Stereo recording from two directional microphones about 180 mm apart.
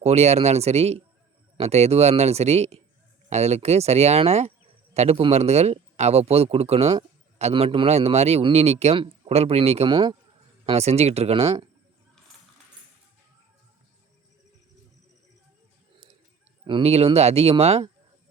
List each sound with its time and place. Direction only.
0.0 s a man's voice: 35° right (ahead or behind)
16.6 s a man's voice: 30° right (ahead or behind)